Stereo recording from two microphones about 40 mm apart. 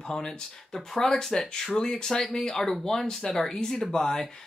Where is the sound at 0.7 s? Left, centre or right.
Centre.